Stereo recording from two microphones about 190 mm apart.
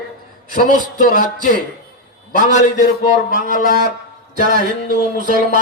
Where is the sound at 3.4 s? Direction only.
45° left (ahead or behind).